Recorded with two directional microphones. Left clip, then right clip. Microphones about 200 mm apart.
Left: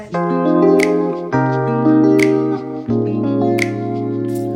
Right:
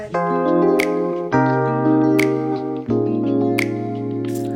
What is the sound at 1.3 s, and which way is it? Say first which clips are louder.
Music: right 1 dB; 90° right.